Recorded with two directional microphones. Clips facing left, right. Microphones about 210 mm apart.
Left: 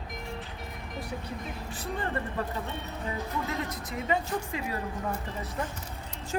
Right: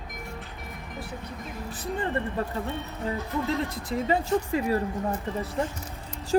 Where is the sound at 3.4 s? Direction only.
30° right (ahead or behind).